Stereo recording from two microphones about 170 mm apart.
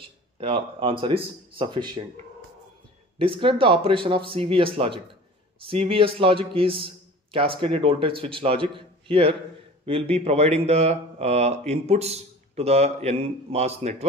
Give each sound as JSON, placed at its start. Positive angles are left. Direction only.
{"t": 0.4, "sound": "speech", "side_deg": -35}
{"t": 3.2, "sound": "speech", "side_deg": -30}